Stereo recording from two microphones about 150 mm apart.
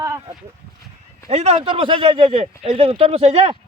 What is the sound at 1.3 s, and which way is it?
Speech, 45° right (ahead or behind).